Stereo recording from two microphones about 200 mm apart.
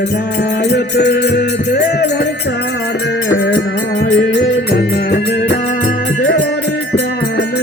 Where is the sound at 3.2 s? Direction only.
75° left (ahead or behind).